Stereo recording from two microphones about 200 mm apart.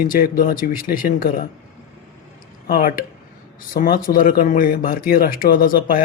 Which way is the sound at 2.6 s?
45° left (ahead or behind).